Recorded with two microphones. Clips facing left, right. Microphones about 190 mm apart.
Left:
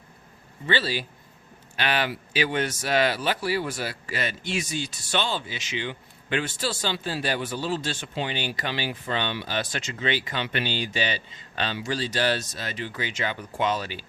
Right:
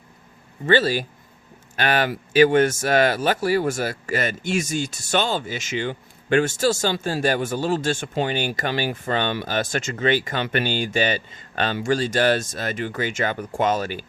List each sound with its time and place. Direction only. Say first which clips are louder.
0.6 s speech: right 8 dB; 45° right (ahead or behind)